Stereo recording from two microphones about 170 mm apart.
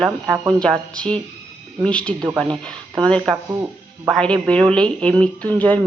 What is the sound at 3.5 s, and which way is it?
Speech, 15° right (ahead or behind).